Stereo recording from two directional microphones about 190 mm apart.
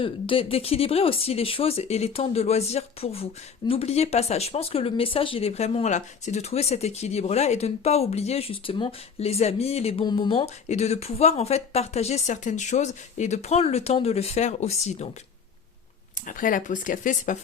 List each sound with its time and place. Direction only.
0.0 s speech: 25° left (ahead or behind)
16.2 s speech: 45° left (ahead or behind)